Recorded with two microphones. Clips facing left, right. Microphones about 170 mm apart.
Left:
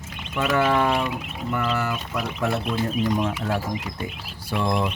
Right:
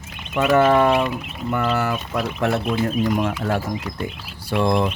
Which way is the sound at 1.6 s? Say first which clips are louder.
Right 4 dB; 65° right (ahead or behind).